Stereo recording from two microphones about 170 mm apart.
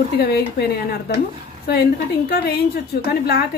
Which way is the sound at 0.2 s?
70° left (ahead or behind).